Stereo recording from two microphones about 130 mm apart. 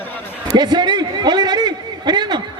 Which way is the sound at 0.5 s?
35° right (ahead or behind).